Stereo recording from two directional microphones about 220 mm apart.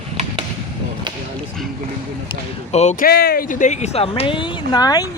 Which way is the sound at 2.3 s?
30° left (ahead or behind).